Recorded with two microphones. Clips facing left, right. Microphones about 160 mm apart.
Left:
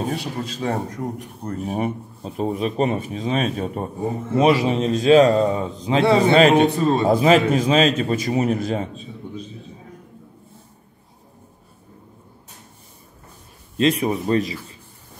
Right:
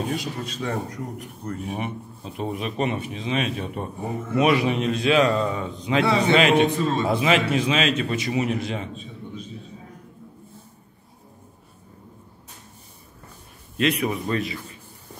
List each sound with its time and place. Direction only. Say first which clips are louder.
0.1 s speech: left 2 dB; 30° left (ahead or behind)
13.7 s speech: left 4 dB; 30° left (ahead or behind)